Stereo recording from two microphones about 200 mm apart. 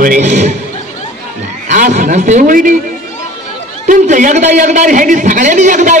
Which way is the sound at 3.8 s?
40° right (ahead or behind).